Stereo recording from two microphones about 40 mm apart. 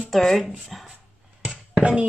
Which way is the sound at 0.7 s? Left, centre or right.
Centre.